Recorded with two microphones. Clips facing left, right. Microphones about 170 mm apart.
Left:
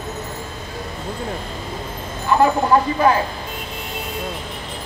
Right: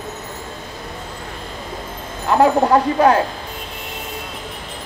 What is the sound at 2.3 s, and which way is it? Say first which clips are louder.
Speech: right 2 dB; 70° right (ahead or behind).